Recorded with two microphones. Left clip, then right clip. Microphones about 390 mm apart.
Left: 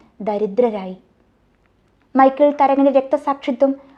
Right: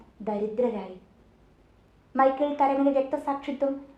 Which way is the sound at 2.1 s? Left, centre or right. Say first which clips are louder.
Left 10 dB; left.